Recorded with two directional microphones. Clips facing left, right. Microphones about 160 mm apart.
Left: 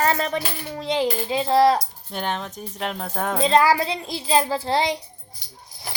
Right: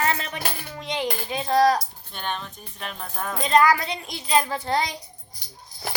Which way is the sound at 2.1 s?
90° left.